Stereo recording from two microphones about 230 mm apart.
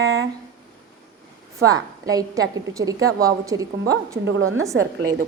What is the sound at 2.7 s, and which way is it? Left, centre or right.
Female singing, centre.